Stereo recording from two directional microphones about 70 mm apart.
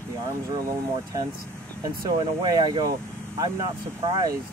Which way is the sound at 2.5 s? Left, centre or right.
Right.